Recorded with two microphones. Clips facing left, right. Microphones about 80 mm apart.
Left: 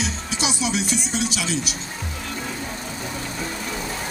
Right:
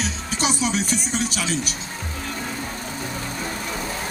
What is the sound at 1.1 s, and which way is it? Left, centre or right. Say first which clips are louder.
Music: even; right.